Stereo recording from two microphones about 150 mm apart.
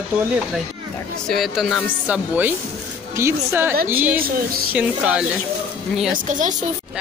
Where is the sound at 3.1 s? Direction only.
15° right (ahead or behind).